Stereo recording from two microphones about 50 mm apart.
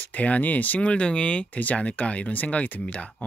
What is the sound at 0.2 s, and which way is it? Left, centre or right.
Speech, left.